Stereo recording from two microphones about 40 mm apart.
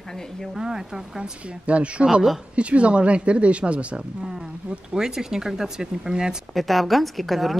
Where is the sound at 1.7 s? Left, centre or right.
Right.